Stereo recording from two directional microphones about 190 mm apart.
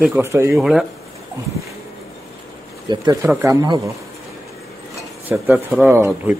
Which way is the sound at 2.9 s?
20° right (ahead or behind).